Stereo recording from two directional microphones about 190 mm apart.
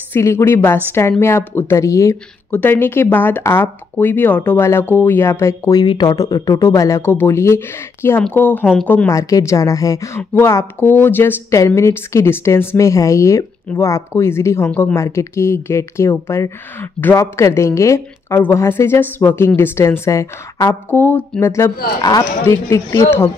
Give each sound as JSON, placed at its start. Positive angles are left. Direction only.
{"t": 0.1, "sound": "speech", "side_deg": 15}